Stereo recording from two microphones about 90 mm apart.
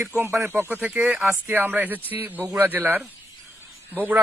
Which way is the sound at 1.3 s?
25° right (ahead or behind).